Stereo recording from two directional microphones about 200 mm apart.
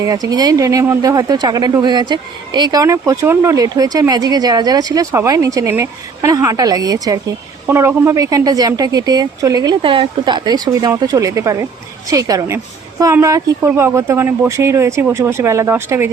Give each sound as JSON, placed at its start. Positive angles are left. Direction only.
{"t": 0.0, "sound": "speech", "side_deg": -20}